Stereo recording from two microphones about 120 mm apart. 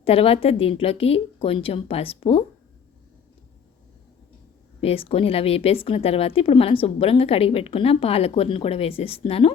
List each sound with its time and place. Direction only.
0.0 s a woman's voice: 55° left (ahead or behind)
4.8 s a woman's voice: 55° left (ahead or behind)